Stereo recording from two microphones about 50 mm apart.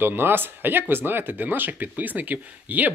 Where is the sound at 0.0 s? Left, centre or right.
Right.